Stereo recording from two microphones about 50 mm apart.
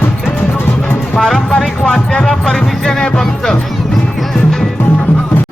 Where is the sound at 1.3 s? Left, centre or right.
Centre.